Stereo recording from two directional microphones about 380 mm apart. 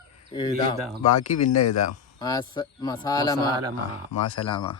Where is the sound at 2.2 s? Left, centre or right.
Centre.